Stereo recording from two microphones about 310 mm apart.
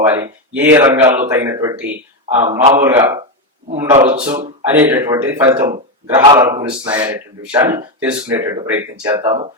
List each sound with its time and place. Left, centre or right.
0.0 s speech: centre